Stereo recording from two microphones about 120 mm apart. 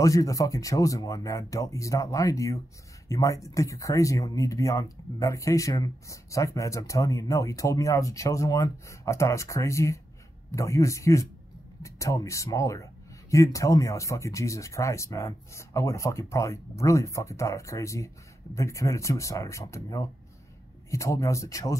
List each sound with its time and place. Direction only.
0.0 s speech: 30° left (ahead or behind)